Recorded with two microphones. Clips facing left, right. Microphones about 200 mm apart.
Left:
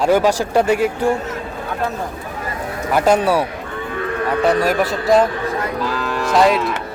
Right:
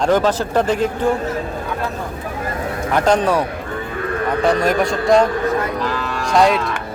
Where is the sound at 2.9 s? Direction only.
10° left (ahead or behind).